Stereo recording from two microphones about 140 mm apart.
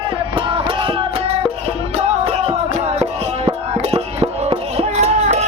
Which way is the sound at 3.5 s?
50° right (ahead or behind).